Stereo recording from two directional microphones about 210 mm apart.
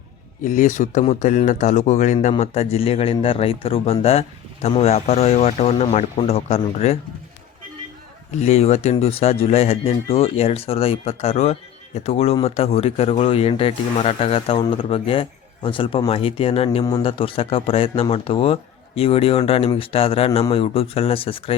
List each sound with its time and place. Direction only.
0.4 s speech: 35° left (ahead or behind)
8.4 s speech: 30° left (ahead or behind)